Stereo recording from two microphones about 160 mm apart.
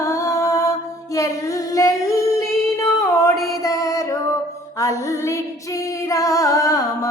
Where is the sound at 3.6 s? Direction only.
20° left (ahead or behind).